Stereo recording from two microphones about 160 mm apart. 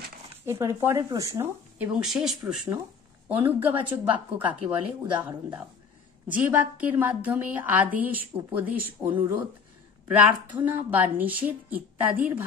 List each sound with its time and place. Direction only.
0.5 s a woman's voice: 15° right (ahead or behind)
2.0 s a woman's voice: centre (ahead or behind)
6.2 s a woman's voice: 10° right (ahead or behind)